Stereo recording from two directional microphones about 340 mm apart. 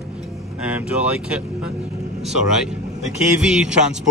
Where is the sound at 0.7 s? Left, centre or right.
Centre.